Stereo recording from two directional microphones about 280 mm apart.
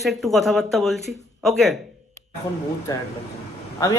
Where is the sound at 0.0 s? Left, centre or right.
Centre.